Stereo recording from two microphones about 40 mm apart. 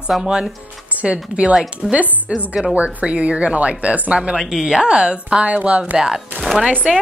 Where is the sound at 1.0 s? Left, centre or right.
Right.